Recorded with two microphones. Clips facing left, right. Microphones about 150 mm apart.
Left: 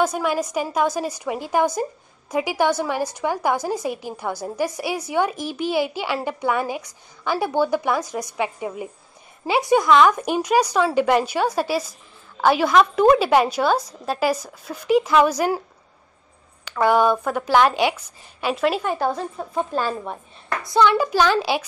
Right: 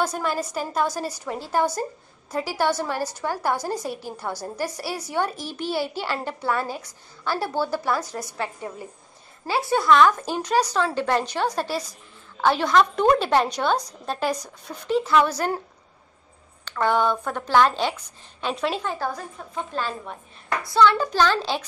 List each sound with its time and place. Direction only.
0.0 s a woman's voice: 10° left (ahead or behind)
16.6 s a woman's voice: 10° left (ahead or behind)
18.9 s a woman's voice: 20° left (ahead or behind)
19.3 s a woman's voice: 40° left (ahead or behind)
20.6 s a woman's voice: 15° left (ahead or behind)